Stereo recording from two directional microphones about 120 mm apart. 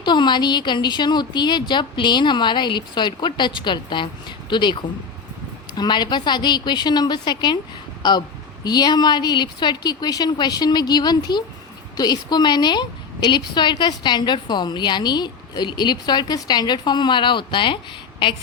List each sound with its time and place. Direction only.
0.0 s a woman's voice: 40° left (ahead or behind)
8.6 s a woman's voice: 35° left (ahead or behind)